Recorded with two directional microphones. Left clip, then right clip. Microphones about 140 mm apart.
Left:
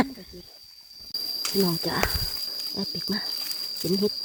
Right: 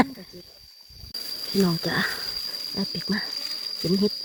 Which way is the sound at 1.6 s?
Centre (ahead or behind).